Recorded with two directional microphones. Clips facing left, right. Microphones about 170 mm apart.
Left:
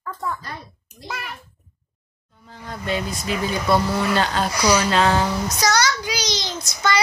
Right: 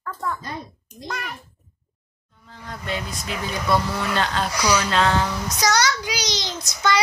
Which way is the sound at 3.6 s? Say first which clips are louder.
Left 2 dB; 25° left (ahead or behind).